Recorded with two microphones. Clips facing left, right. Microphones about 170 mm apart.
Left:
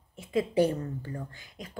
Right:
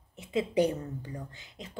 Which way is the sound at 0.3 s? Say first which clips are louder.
Left 2 dB; 20° right (ahead or behind).